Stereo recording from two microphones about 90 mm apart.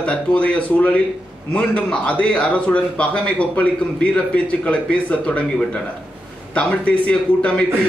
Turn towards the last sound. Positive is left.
turn(degrees=10)  # may be behind; listen again after turning